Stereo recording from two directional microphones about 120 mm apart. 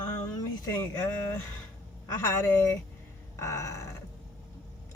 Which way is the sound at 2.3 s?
20° left (ahead or behind).